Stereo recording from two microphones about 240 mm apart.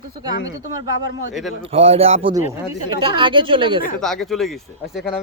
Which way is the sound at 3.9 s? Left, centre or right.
Centre.